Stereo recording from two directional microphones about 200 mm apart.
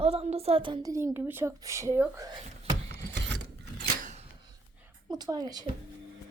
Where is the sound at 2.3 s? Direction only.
30° right (ahead or behind).